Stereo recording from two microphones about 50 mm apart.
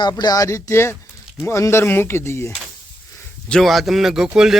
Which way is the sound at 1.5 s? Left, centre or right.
Left.